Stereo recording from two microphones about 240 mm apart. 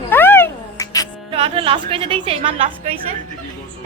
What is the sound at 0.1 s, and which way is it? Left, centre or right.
Cat, centre.